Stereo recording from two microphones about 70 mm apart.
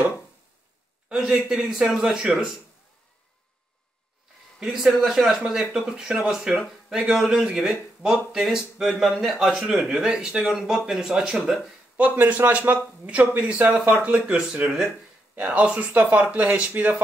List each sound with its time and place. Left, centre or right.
1.0 s a man's voice: centre
4.6 s speech: centre
12.0 s a man's voice: right